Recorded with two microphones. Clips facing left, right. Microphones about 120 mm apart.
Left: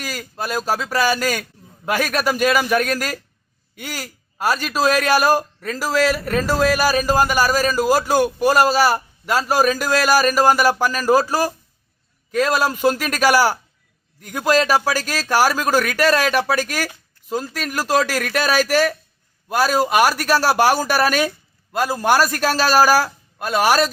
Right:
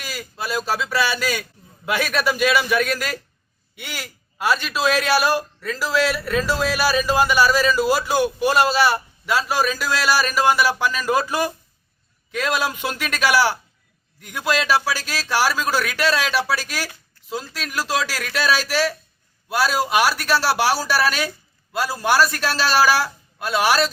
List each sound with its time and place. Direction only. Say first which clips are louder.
0.0 s a man's voice: left 3 dB; 45° left (ahead or behind)